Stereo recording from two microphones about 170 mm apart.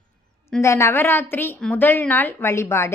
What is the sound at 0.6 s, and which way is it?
A woman's voice, 15° left (ahead or behind).